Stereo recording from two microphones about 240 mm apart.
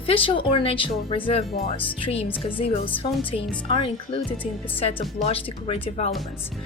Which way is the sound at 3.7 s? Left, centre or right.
Centre.